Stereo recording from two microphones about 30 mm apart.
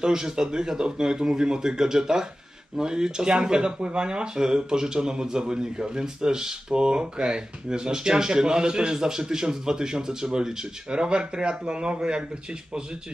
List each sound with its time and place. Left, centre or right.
0.0 s speech: right